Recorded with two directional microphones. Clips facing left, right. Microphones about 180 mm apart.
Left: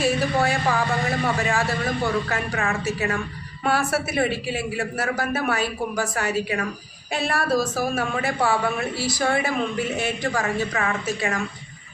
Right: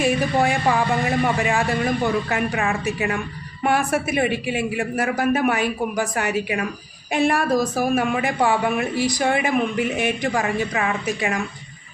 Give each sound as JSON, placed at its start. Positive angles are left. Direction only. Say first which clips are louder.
{"t": 0.0, "sound": "a man's voice", "louder": "right 2 dB", "side_deg": -15}